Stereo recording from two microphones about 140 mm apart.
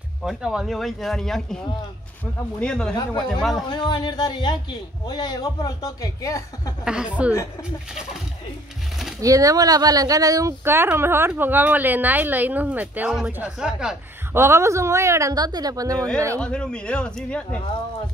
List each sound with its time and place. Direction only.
0.2 s speech: centre (ahead or behind)
2.6 s speech: 5° left (ahead or behind)
3.0 s speech: 30° left (ahead or behind)
3.3 s speech: centre (ahead or behind)
3.6 s speech: 30° left (ahead or behind)
6.8 s speech: 5° right (ahead or behind)
9.2 s speech: 25° right (ahead or behind); by 13.9 s 5° right (ahead or behind)
14.3 s a woman's voice: 20° right (ahead or behind)
16.3 s a man's voice: 5° left (ahead or behind)